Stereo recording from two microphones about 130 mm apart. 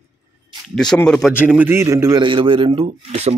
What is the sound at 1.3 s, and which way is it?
Speech, 10° right (ahead or behind).